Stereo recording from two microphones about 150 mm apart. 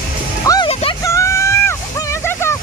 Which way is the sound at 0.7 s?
40° left (ahead or behind).